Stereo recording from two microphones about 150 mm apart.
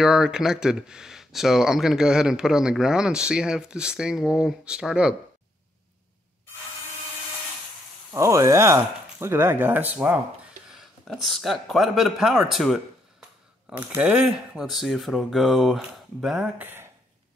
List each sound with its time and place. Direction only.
0.0 s speech: 5° right (ahead or behind)
8.1 s speech: 20° right (ahead or behind)